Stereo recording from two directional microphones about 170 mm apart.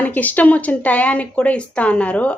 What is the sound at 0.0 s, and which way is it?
A woman's voice, 10° left (ahead or behind).